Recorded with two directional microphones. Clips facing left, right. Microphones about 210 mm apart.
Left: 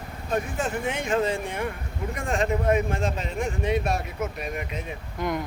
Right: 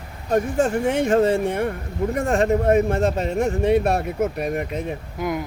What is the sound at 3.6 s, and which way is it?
Speech, 60° right (ahead or behind).